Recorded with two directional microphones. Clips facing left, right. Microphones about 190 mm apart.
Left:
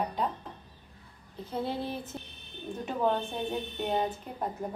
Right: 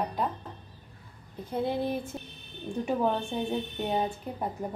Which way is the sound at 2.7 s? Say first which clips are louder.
Right 5 dB; 5° left (ahead or behind).